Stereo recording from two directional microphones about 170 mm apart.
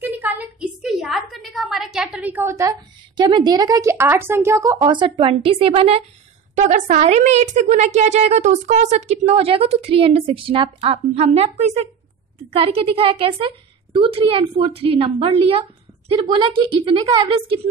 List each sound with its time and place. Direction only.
0.0 s a sound: 10° right (ahead or behind)
3.2 s a woman's voice: 25° right (ahead or behind)
6.5 s a woman's voice: 50° right (ahead or behind); by 17.6 s 30° right (ahead or behind)